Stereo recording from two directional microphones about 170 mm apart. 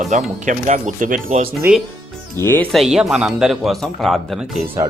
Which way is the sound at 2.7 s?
Centre (ahead or behind).